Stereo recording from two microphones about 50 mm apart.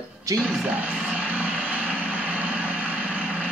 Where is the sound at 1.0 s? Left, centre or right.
Right.